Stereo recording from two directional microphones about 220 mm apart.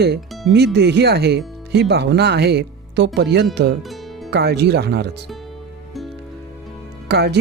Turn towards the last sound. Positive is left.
turn(degrees=-50)  # may be behind; listen again after turning